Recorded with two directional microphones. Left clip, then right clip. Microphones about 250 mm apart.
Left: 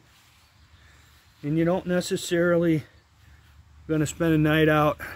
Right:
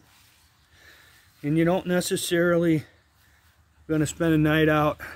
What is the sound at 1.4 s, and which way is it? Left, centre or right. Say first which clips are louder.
Speech: right 1 dB; right.